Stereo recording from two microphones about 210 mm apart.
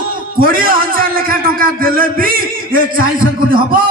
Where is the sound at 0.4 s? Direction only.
40° right (ahead or behind).